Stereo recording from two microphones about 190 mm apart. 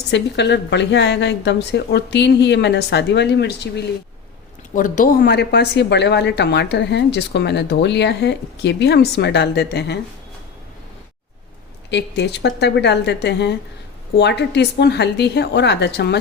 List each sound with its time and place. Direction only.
0.1 s speech: 65° left (ahead or behind)
4.7 s speech: 45° left (ahead or behind); by 10.0 s 60° left (ahead or behind)
11.9 s speech: 65° left (ahead or behind)